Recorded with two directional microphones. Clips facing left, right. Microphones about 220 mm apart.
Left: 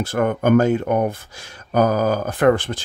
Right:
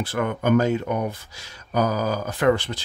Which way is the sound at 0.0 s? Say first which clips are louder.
Left 5 dB; 45° left (ahead or behind).